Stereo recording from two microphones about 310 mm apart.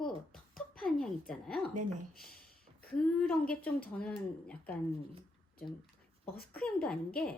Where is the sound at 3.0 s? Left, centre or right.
Centre.